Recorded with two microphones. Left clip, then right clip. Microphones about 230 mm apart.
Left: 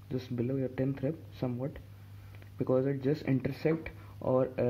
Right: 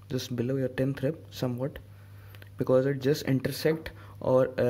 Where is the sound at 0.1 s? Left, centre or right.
Right.